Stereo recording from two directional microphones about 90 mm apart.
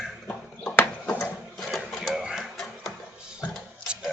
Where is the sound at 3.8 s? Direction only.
10° right (ahead or behind).